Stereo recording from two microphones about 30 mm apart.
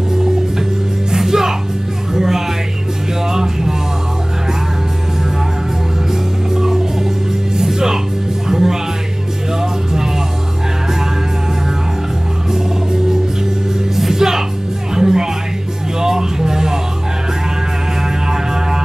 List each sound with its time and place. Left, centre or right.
0.1 s music: centre
6.5 s music: centre
8.5 s music: centre
13.9 s music: centre